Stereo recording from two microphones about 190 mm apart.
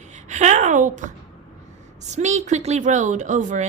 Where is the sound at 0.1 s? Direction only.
40° right (ahead or behind).